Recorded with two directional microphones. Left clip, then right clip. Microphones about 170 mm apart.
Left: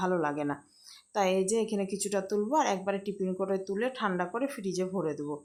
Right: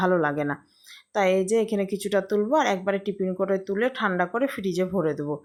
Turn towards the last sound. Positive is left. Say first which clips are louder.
# right 7 dB
turn(degrees=-25)  # may be behind; listen again after turning